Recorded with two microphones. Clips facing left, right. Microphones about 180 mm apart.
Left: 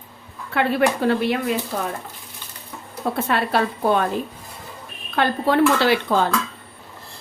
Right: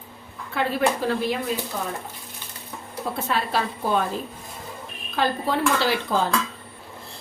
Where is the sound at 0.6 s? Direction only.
65° left (ahead or behind).